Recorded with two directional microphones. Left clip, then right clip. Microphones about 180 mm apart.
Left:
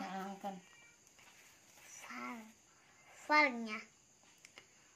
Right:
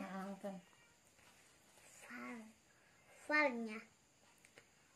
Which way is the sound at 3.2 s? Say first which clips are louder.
Left 5 dB; 15° right (ahead or behind).